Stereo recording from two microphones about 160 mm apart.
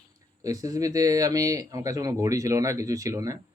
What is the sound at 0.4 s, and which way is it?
Speech, 20° right (ahead or behind).